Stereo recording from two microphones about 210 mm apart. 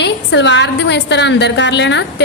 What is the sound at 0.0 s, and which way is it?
A woman's voice, 60° left (ahead or behind).